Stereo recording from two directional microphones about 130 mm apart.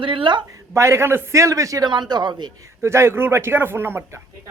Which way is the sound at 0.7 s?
20° right (ahead or behind).